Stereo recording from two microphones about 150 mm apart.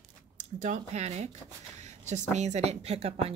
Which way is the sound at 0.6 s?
55° right (ahead or behind).